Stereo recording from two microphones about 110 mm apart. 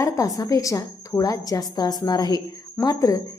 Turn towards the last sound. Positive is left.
turn(degrees=30)  # may be behind; listen again after turning